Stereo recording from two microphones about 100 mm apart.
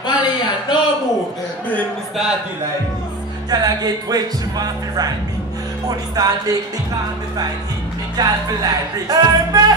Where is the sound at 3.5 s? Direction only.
40° right (ahead or behind).